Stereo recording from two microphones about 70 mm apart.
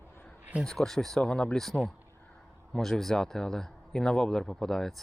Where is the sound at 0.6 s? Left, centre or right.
Centre.